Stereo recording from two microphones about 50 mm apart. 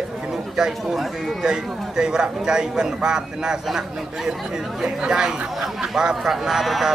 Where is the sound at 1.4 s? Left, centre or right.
Centre.